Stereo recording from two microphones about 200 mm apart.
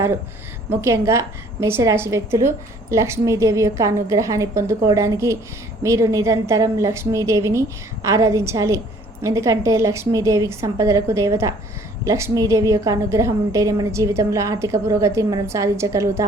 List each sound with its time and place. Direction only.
0.7 s a woman's voice: 15° right (ahead or behind)